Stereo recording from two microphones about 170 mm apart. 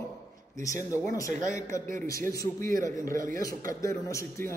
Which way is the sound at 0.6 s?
20° left (ahead or behind).